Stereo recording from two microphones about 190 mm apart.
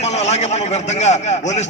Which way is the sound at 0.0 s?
35° left (ahead or behind).